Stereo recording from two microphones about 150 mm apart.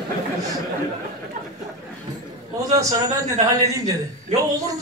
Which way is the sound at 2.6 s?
25° right (ahead or behind).